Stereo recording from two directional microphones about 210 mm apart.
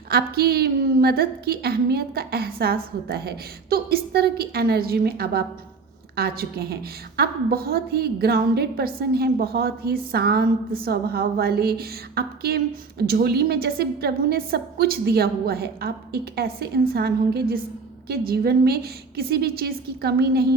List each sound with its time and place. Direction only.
0.1 s a woman's voice: 45° right (ahead or behind)